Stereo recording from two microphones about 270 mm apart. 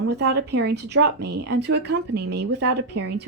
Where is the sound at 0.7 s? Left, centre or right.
Right.